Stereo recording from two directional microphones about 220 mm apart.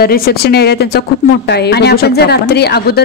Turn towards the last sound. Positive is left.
turn(degrees=45)  # may be behind; listen again after turning